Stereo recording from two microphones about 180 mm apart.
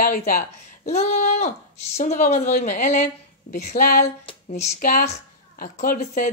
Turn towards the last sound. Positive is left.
turn(degrees=50)  # may be behind; listen again after turning